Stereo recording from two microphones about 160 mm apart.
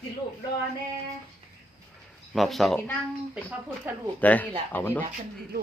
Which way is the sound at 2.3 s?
Centre (ahead or behind).